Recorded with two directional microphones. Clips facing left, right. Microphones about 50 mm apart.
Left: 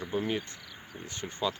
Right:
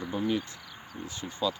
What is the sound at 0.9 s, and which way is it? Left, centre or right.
Speech, left.